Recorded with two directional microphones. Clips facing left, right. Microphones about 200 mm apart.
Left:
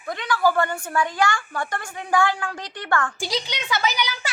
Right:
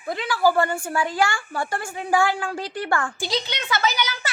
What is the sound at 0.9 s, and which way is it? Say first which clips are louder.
A woman's voice: left 2 dB; 30° right (ahead or behind).